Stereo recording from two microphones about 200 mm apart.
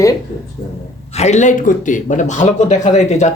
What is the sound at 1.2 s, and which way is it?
Speech, 35° left (ahead or behind).